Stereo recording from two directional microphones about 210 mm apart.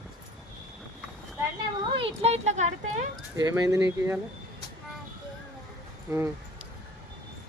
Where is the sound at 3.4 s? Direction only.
15° right (ahead or behind).